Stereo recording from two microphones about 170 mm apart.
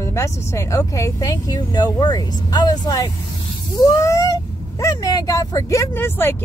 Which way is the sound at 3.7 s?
20° left (ahead or behind).